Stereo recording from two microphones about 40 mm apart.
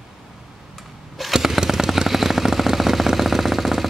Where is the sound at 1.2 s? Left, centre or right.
Centre.